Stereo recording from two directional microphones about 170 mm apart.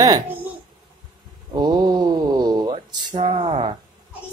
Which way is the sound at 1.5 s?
25° right (ahead or behind).